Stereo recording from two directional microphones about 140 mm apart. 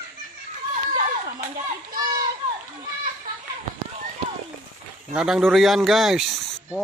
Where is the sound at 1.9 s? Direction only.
30° right (ahead or behind).